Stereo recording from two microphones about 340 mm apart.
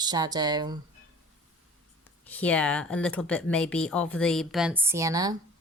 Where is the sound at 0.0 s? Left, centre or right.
Centre.